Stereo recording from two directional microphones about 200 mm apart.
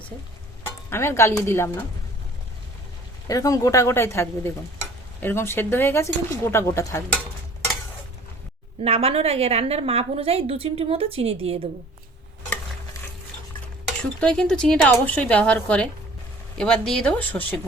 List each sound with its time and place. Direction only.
0.9 s speech: 10° left (ahead or behind)
3.2 s speech: 15° left (ahead or behind)
8.8 s a woman's voice: 30° right (ahead or behind)
14.2 s speech: 5° left (ahead or behind)